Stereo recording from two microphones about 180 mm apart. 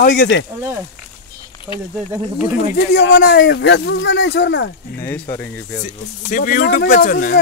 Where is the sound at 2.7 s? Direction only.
70° left (ahead or behind).